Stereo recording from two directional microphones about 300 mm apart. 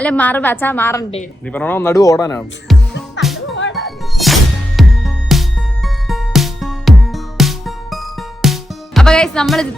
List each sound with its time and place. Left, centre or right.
0.0 s a woman's voice: centre
2.7 s music: centre
3.2 s music: left
3.8 s music: centre
9.0 s speech: centre